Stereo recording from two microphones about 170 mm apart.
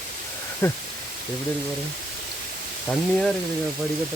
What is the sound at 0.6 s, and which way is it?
Speech, 15° left (ahead or behind).